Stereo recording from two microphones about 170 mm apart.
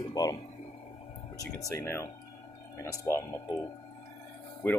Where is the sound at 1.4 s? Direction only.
20° left (ahead or behind).